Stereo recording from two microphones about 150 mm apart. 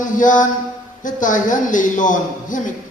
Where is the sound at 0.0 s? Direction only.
60° left (ahead or behind).